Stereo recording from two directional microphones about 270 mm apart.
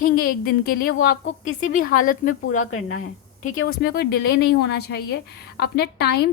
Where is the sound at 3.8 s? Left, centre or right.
Left.